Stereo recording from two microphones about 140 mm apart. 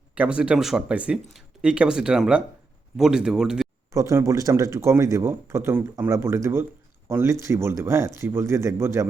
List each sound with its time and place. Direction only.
0.1 s speech: 5° right (ahead or behind)
3.9 s speech: 25° right (ahead or behind)